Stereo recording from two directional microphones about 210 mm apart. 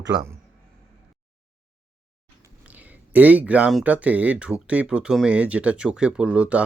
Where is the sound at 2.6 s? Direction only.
5° right (ahead or behind).